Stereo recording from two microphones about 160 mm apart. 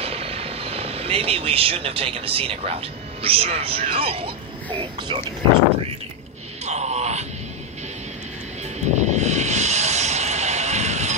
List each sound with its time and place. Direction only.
0.0 s speech: 40° right (ahead or behind)
6.6 s a sound: 45° right (ahead or behind)
8.7 s vehicle: 45° right (ahead or behind)